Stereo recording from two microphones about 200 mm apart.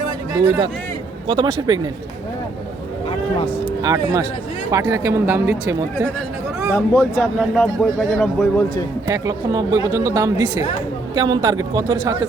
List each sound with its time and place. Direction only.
0.3 s speech: 15° right (ahead or behind)
1.3 s a man's voice: 25° right (ahead or behind)
3.8 s a man's voice: 20° right (ahead or behind)
6.7 s a man's voice: 15° left (ahead or behind)
7.3 s speech: centre (ahead or behind)
9.0 s a man's voice: 20° right (ahead or behind)